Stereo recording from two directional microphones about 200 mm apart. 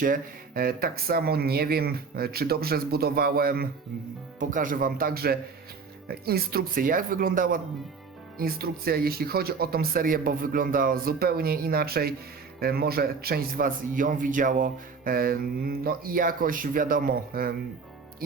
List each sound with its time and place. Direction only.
0.0 s speech: 45° right (ahead or behind)